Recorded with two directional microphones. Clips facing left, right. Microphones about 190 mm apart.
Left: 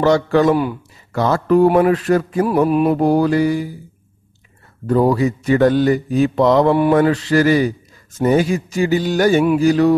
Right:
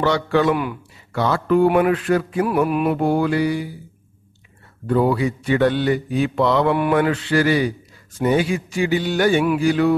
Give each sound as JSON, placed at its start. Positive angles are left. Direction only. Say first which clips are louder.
{"t": 0.0, "sound": "speech", "louder": "left 4 dB", "side_deg": 40}
{"t": 1.1, "sound": "mantra", "louder": "left 3 dB", "side_deg": 45}
{"t": 4.8, "sound": "mantra", "louder": "left 3 dB", "side_deg": 40}
{"t": 6.7, "sound": "mantra", "louder": "left 4 dB", "side_deg": 30}